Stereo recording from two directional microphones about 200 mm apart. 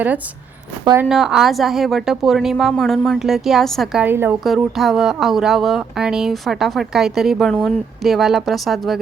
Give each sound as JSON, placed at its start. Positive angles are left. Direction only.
{"t": 1.0, "sound": "speech", "side_deg": 0}